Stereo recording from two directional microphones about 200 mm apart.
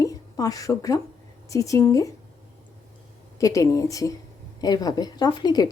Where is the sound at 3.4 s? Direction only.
15° left (ahead or behind).